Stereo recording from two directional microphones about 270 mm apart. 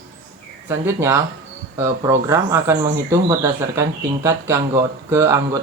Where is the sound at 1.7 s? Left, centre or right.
Centre.